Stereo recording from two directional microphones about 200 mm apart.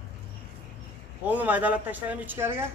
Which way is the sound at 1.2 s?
10° right (ahead or behind).